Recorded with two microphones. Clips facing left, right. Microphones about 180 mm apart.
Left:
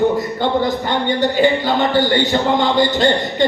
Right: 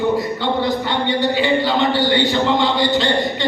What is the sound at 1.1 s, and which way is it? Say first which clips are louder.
Speech: left 3 dB; 45° left (ahead or behind).